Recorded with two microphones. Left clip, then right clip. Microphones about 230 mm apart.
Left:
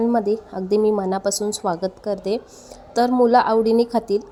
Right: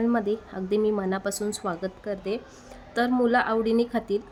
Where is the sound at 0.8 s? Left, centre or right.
Centre.